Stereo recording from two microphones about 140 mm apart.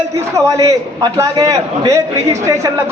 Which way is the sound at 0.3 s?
25° right (ahead or behind).